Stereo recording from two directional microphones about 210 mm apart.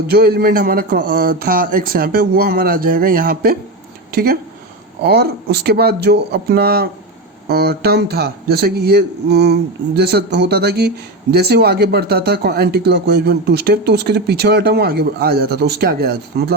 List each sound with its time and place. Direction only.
0.1 s a man's voice: 50° right (ahead or behind)